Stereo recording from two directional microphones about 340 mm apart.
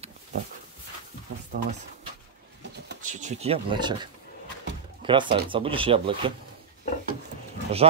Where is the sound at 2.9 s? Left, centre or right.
Right.